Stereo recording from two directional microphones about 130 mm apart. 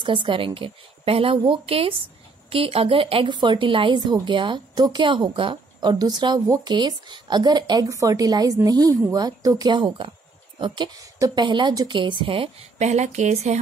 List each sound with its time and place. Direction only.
0.0 s a woman's voice: 40° right (ahead or behind)
12.8 s speech: 60° right (ahead or behind)